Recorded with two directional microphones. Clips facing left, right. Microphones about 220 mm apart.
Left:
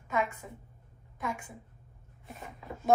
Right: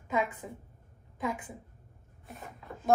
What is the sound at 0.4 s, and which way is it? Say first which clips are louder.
Speech: right 4 dB; 15° right (ahead or behind).